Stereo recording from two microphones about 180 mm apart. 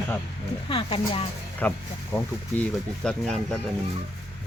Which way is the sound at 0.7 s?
30° left (ahead or behind).